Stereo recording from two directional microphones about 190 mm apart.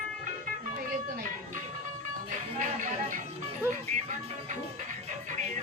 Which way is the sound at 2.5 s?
45° right (ahead or behind).